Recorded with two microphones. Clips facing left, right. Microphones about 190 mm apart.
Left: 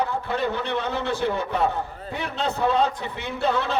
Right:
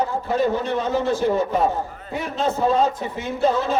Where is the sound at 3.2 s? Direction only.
65° left (ahead or behind).